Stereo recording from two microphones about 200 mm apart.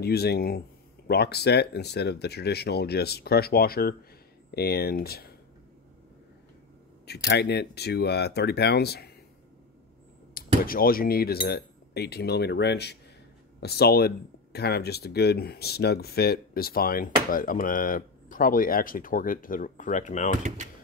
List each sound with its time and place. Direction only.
0.0 s speech: 55° left (ahead or behind)
7.2 s speech: 55° left (ahead or behind)
10.3 s speech: 45° left (ahead or behind)
20.4 s speech: 35° right (ahead or behind)